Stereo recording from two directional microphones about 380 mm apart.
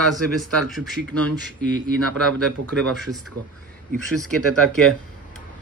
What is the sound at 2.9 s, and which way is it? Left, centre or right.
Speech, centre.